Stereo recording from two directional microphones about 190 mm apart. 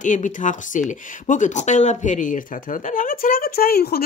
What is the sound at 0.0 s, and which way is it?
Speech, 40° left (ahead or behind).